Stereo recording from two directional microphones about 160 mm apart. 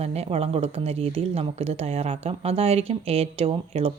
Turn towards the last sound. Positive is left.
turn(degrees=-35)  # may be behind; listen again after turning